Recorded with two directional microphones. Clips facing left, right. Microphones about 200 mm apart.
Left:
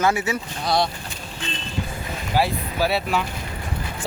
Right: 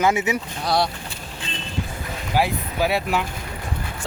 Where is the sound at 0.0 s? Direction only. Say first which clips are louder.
Right 1 dB; 20° right (ahead or behind).